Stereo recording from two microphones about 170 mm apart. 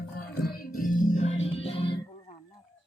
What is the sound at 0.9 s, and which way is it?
Music, 40° left (ahead or behind).